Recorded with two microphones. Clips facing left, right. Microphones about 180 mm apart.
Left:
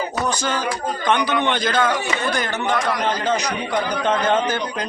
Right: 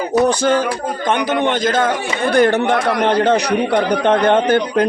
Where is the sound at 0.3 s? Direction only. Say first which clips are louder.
Right 8 dB; 55° right (ahead or behind).